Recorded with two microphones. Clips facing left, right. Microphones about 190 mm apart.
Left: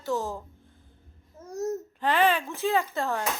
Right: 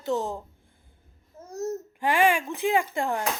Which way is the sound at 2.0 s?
10° right (ahead or behind).